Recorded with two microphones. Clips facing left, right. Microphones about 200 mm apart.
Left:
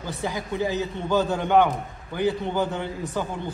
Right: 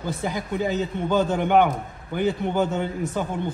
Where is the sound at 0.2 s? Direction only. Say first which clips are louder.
Left 1 dB; 15° right (ahead or behind).